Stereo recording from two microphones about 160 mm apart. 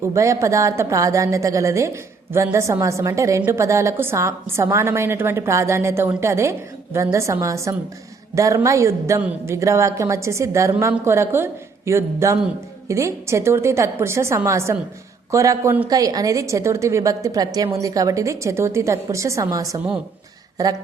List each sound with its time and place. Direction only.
0.1 s a woman's voice: 20° right (ahead or behind)